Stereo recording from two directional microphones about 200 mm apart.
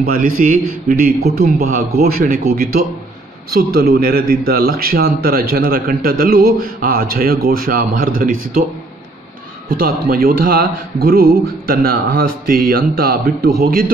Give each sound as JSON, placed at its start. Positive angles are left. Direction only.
{"t": 0.0, "sound": "speech", "side_deg": -45}
{"t": 9.7, "sound": "speech", "side_deg": -45}